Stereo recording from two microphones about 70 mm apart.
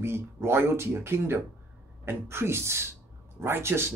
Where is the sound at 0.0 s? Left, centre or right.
Right.